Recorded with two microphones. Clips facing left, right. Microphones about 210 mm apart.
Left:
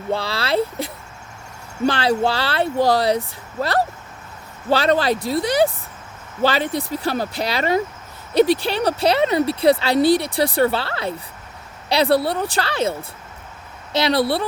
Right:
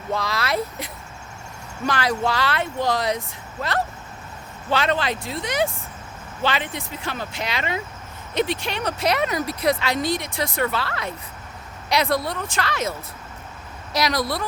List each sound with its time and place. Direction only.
0.1 s speech: 30° left (ahead or behind)